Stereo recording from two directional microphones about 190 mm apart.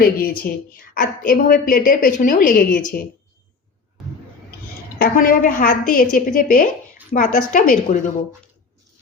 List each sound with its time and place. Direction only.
0.0 s a woman's voice: 55° left (ahead or behind)
4.9 s a woman's voice: 50° left (ahead or behind)